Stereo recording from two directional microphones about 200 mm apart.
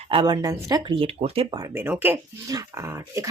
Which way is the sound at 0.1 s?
20° right (ahead or behind).